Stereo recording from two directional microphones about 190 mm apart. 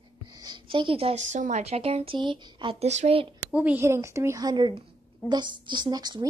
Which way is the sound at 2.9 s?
35° right (ahead or behind).